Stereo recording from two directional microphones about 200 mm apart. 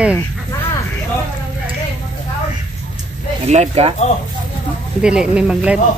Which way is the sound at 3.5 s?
35° right (ahead or behind).